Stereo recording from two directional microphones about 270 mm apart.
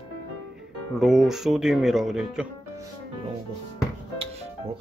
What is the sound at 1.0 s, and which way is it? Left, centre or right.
Speech, centre.